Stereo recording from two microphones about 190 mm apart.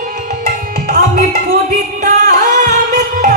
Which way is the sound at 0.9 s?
50° right (ahead or behind).